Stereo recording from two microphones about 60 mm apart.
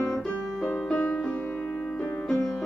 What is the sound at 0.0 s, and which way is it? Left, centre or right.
Piano, centre.